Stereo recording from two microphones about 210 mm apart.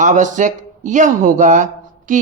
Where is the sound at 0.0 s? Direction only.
35° right (ahead or behind).